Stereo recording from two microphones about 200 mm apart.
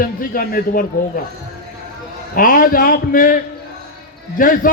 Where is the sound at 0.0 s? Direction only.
45° left (ahead or behind).